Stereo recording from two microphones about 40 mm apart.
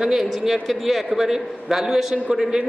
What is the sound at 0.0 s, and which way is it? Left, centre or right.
A man's voice, centre.